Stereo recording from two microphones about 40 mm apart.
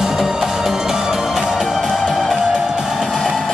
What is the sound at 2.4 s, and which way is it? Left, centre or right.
Music, centre.